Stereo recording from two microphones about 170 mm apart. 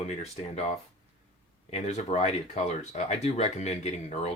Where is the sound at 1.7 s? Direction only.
40° left (ahead or behind).